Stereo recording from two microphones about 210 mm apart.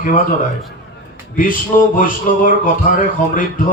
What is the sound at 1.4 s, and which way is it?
Speech, 40° left (ahead or behind).